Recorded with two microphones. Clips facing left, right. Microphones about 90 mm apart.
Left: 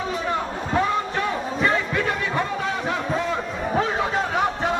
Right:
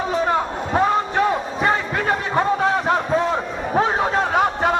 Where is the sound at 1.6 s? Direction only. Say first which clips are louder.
Right 2 dB; 40° right (ahead or behind).